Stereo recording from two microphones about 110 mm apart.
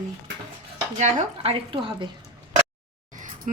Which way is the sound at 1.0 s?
90° right.